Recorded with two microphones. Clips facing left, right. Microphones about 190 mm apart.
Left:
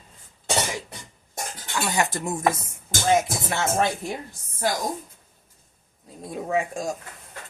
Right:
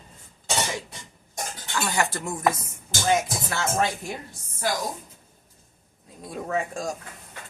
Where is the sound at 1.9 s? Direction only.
20° left (ahead or behind).